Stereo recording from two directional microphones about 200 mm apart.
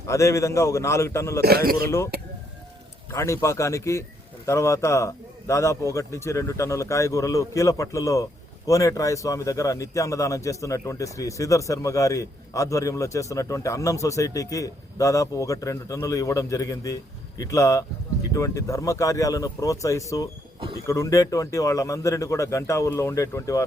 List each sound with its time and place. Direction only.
0.1 s a man's voice: 15° left (ahead or behind)
1.4 s a man's voice: 50° right (ahead or behind)
3.1 s a man's voice: 15° left (ahead or behind)